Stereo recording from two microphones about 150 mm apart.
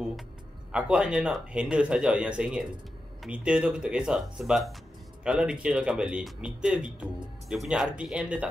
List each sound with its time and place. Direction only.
0.7 s speech: 5° right (ahead or behind)